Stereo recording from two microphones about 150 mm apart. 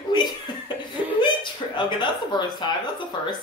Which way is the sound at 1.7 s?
30° left (ahead or behind).